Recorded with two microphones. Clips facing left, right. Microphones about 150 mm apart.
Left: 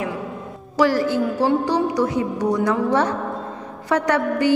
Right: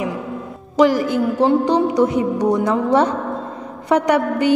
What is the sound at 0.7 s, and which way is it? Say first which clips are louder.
A woman's voice: right 3 dB; 15° right (ahead or behind).